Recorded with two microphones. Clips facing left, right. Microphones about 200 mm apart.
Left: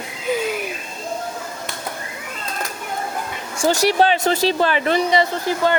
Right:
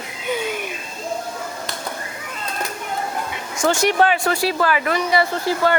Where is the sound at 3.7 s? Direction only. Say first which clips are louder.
Left 1 dB; 35° left (ahead or behind).